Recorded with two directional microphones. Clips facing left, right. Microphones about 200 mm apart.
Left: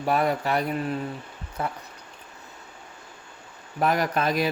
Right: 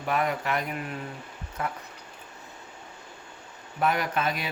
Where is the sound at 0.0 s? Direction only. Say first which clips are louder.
Left 4 dB; 35° left (ahead or behind).